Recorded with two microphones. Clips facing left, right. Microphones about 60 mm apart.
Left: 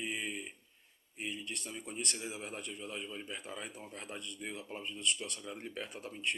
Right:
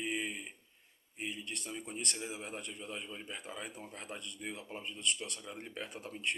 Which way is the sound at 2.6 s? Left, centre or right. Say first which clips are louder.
Left 1 dB; right.